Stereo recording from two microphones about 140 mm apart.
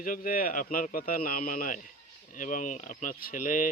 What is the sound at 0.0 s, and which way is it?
Speech, 85° left.